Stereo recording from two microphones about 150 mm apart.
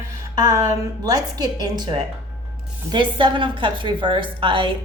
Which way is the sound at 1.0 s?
25° right (ahead or behind).